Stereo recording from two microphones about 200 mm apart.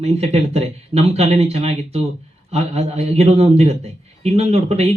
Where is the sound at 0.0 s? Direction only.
30° right (ahead or behind).